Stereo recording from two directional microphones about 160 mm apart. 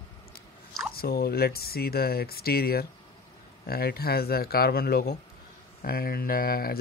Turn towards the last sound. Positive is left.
turn(degrees=70)  # may be behind; listen again after turning